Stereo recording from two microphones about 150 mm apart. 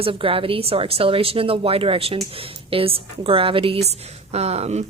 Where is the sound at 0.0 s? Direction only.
35° right (ahead or behind).